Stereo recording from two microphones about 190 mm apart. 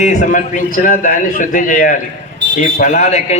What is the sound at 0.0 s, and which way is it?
A man's voice, 40° left (ahead or behind).